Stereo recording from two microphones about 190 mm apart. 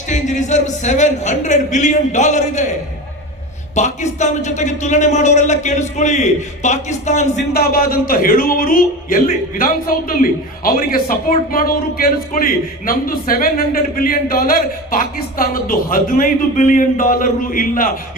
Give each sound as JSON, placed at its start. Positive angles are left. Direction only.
{"t": 0.1, "sound": "a man's voice", "side_deg": 40}
{"t": 3.8, "sound": "a man's voice", "side_deg": 35}
{"t": 7.5, "sound": "a man's voice", "side_deg": 50}